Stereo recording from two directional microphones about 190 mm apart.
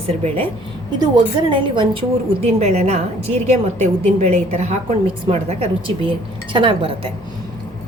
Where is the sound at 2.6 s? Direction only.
35° right (ahead or behind).